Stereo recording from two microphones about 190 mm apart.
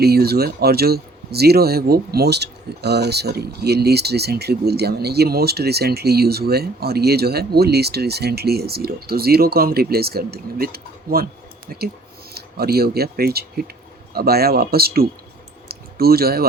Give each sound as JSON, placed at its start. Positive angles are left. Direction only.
{"t": 0.0, "sound": "speech", "side_deg": -55}
{"t": 12.3, "sound": "speech", "side_deg": -55}
{"t": 15.7, "sound": "a sound", "side_deg": -55}